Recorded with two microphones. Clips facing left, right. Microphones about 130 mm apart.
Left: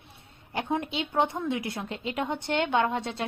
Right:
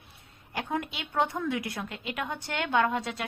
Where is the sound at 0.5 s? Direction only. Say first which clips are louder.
Left 3 dB; 25° left (ahead or behind).